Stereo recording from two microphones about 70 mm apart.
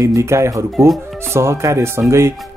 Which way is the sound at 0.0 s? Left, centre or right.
Right.